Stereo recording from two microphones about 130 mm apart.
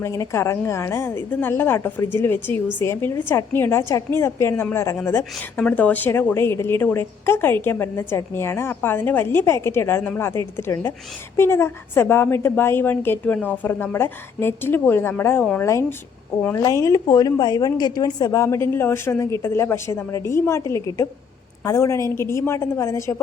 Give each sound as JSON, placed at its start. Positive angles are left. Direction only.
{"t": 0.0, "sound": "a woman's voice", "side_deg": 25}